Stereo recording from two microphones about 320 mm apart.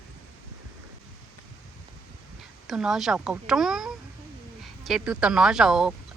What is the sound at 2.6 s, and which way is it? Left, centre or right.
Speech, centre.